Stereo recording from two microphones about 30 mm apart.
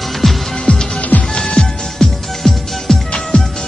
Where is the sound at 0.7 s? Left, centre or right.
Left.